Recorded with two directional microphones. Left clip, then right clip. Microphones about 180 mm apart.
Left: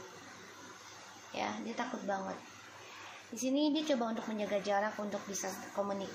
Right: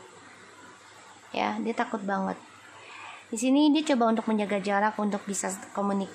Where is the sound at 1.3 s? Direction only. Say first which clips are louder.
Right 10 dB; 45° right (ahead or behind).